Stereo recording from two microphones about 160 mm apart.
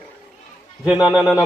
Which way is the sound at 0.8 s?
5° right (ahead or behind).